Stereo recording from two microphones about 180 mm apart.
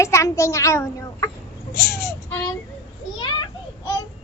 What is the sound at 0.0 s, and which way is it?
A child's voice, 15° left (ahead or behind).